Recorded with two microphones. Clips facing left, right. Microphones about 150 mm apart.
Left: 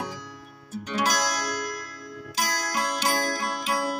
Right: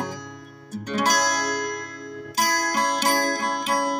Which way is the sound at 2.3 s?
45° right (ahead or behind).